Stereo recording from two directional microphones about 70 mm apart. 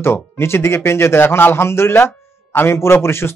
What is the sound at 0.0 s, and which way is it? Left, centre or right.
Speech, left.